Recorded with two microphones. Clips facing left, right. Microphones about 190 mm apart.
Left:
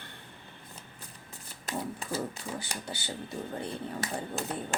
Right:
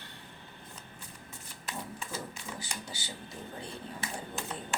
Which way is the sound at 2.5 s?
60° left (ahead or behind).